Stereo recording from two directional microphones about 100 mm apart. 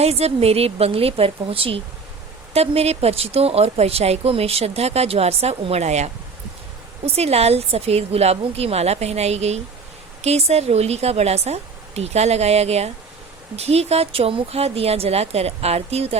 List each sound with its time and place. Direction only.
0.0 s a woman's voice: 90° right; by 1.8 s 70° right (ahead or behind)
2.5 s speech: 90° right